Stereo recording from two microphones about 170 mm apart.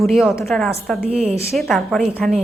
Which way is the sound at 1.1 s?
40° right (ahead or behind).